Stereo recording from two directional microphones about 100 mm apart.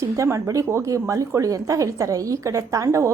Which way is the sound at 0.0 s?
30° right (ahead or behind).